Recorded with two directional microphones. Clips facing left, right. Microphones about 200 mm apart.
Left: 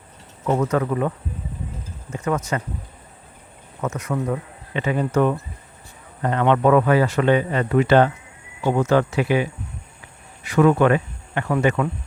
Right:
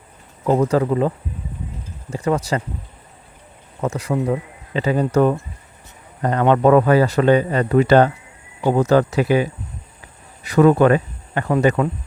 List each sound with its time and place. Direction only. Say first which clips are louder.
0.4 s speech: right 4 dB; 35° right (ahead or behind)
3.8 s speech: right 4 dB; 30° right (ahead or behind)